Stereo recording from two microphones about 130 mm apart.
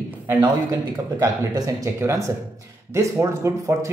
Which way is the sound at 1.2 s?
30° right (ahead or behind).